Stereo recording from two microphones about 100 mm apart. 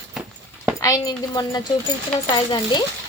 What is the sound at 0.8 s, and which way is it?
Speech, 35° left (ahead or behind).